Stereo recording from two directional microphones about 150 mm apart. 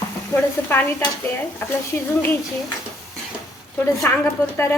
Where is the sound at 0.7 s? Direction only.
15° left (ahead or behind).